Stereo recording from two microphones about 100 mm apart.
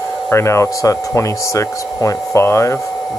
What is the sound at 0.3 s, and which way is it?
Speech, 25° left (ahead or behind).